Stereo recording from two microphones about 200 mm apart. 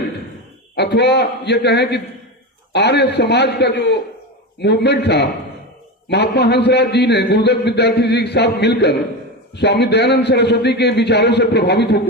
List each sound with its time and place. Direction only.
0.8 s a man's voice: 55° left (ahead or behind)